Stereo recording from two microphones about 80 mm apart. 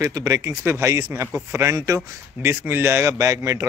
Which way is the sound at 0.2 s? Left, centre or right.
Right.